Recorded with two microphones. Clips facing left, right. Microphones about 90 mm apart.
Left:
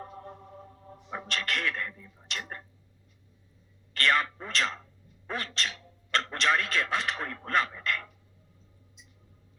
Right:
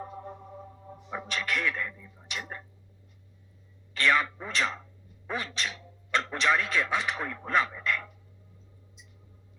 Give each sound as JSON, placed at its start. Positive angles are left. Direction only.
{"t": 0.0, "sound": "a sound", "side_deg": -15}
{"t": 1.2, "sound": "speech", "side_deg": -15}
{"t": 3.9, "sound": "a man's voice", "side_deg": -15}